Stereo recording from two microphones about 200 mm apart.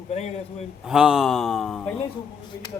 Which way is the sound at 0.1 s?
35° left (ahead or behind).